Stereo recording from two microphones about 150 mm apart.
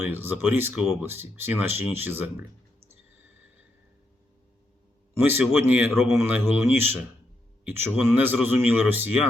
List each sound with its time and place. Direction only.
0.0 s speech: 15° right (ahead or behind)
5.1 s speech: 15° right (ahead or behind)